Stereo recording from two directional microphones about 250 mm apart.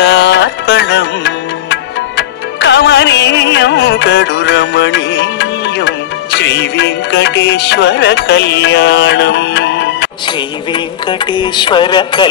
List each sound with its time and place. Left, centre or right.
0.0 s music: left
10.2 s music: centre